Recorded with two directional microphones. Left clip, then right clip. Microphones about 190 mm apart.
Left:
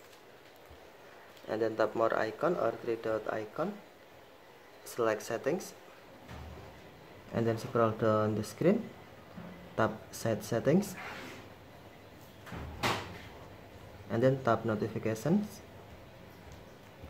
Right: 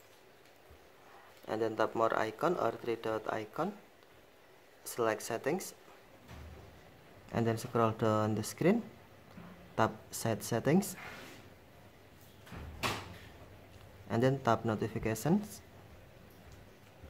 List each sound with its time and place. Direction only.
1.5 s speech: 20° right (ahead or behind)
4.8 s speech: 20° right (ahead or behind)
7.3 s speech: 25° right (ahead or behind)
9.8 s speech: 20° right (ahead or behind)
14.0 s speech: 20° right (ahead or behind)